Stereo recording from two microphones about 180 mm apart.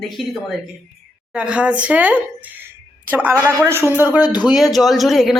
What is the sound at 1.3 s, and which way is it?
A man's voice, 5° right (ahead or behind).